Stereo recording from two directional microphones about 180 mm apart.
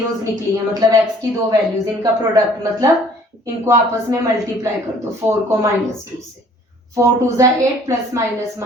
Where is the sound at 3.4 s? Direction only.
15° right (ahead or behind).